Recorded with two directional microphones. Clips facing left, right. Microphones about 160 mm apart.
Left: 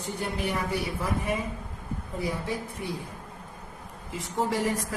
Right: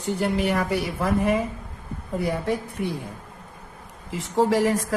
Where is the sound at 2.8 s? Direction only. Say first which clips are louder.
Right 6 dB; 70° right (ahead or behind).